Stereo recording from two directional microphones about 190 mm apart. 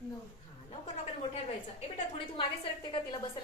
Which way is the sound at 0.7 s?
30° left (ahead or behind).